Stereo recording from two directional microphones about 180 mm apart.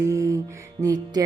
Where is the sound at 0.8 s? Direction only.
20° right (ahead or behind).